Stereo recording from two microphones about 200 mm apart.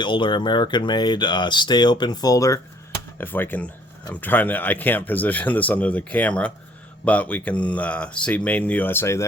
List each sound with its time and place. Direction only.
0.0 s speech: 25° left (ahead or behind)